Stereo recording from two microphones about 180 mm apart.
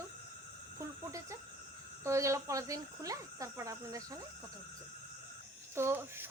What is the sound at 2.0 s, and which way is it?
Speech, 15° right (ahead or behind).